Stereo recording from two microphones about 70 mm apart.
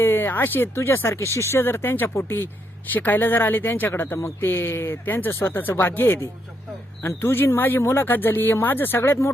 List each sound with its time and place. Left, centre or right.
0.0 s speech: left